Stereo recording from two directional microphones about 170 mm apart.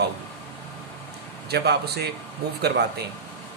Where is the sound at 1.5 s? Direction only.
70° right (ahead or behind).